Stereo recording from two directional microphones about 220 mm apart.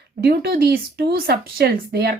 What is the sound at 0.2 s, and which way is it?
Speech, 45° right (ahead or behind).